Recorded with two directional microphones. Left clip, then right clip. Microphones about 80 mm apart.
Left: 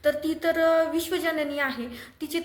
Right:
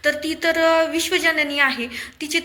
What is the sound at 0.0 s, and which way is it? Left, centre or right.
Speech, left.